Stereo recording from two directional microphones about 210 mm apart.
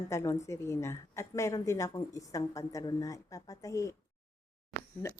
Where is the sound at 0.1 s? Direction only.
15° left (ahead or behind).